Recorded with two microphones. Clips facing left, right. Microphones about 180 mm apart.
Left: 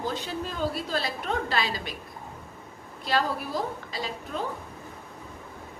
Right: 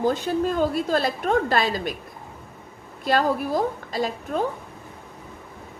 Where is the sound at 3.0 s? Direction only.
50° right (ahead or behind).